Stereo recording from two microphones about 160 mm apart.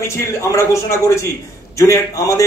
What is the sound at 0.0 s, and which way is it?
A man's voice, 15° left (ahead or behind).